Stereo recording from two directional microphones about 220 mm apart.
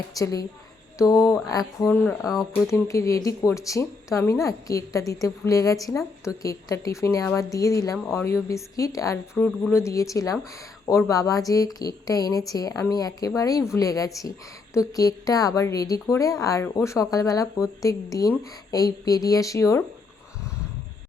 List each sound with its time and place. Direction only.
0.2 s a woman's voice: 15° left (ahead or behind)